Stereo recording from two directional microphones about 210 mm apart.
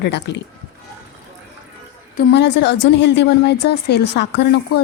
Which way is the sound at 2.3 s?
55° left (ahead or behind).